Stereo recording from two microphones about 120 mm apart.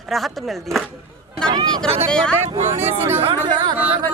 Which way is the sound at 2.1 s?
5° left (ahead or behind).